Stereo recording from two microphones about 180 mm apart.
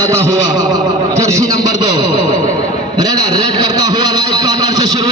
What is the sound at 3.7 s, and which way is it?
Speech, 20° right (ahead or behind).